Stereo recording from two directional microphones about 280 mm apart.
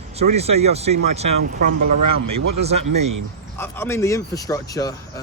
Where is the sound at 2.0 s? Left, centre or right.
Right.